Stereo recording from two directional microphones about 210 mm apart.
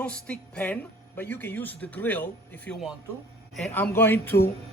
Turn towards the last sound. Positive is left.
turn(degrees=10)  # may be behind; listen again after turning